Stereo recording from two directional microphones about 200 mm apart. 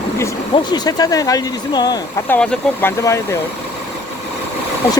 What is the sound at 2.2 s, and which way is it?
Speech, 5° left (ahead or behind).